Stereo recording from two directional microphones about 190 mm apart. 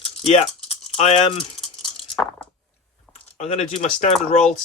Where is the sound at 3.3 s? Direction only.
35° left (ahead or behind).